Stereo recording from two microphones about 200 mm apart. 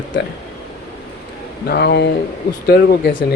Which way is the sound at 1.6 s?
55° left (ahead or behind).